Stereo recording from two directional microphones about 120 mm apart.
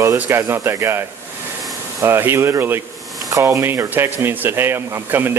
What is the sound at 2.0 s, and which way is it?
Speech, 20° right (ahead or behind).